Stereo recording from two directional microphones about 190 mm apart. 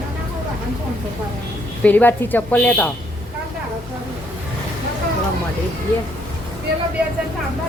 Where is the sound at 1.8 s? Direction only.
10° left (ahead or behind).